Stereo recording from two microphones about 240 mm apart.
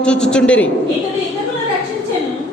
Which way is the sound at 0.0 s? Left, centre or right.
Centre.